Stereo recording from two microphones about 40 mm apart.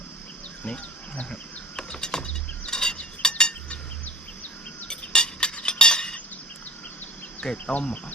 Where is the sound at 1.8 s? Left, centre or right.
Centre.